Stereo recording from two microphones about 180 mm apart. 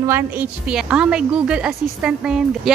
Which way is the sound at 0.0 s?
10° right (ahead or behind).